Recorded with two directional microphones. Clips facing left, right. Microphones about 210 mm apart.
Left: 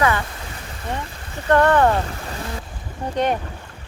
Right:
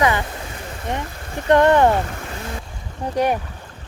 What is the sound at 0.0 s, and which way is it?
Speech, 20° right (ahead or behind).